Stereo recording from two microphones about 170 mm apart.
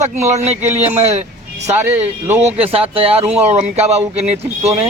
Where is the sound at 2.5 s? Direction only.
35° right (ahead or behind).